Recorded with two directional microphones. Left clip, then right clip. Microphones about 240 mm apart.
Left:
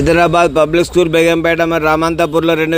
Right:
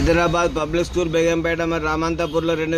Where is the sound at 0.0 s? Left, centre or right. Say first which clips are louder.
Left 8 dB; left.